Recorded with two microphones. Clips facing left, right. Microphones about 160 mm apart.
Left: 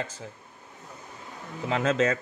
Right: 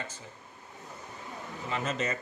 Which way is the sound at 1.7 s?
90° left.